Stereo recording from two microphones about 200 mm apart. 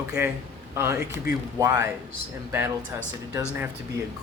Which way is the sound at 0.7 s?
10° right (ahead or behind).